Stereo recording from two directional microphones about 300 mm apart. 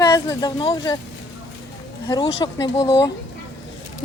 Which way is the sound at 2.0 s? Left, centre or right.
Centre.